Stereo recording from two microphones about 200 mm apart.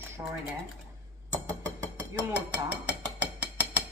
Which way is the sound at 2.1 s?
5° right (ahead or behind).